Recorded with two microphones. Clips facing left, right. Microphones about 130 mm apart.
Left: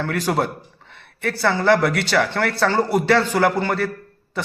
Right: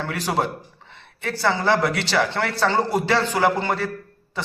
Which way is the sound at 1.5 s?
20° right (ahead or behind).